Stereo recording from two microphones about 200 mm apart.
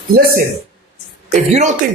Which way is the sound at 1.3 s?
35° right (ahead or behind).